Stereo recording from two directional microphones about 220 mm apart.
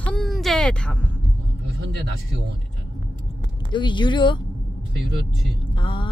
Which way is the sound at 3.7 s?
20° left (ahead or behind).